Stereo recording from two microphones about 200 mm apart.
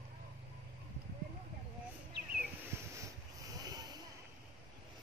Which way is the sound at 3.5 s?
20° right (ahead or behind).